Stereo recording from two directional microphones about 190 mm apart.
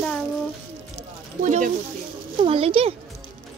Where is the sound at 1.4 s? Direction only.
40° right (ahead or behind).